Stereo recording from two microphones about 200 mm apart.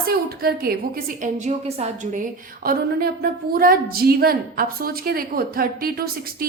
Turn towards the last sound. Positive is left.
turn(degrees=-50)  # may be behind; listen again after turning